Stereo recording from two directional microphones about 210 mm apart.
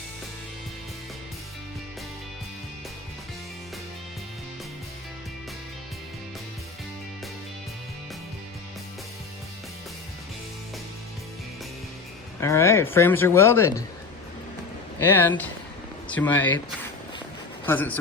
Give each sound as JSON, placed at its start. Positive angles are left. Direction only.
{"t": 12.4, "sound": "speech", "side_deg": 15}
{"t": 14.9, "sound": "speech", "side_deg": 10}
{"t": 17.7, "sound": "a man's voice", "side_deg": 10}